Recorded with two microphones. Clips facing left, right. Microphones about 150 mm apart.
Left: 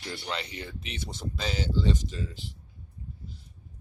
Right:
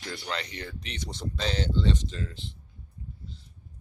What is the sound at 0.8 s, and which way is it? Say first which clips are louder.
Speech: right 1 dB; 5° left (ahead or behind).